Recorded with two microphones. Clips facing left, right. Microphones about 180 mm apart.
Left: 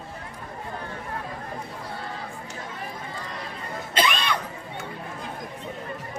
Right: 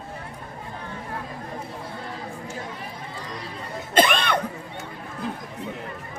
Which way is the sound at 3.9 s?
50° right (ahead or behind).